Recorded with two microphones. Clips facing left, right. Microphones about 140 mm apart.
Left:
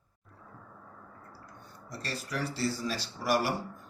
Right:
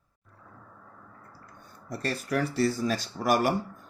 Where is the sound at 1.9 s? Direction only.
55° right (ahead or behind).